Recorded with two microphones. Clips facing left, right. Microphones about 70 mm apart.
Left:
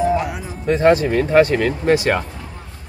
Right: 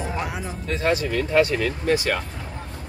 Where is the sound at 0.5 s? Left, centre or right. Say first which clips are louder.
Left 10 dB; left.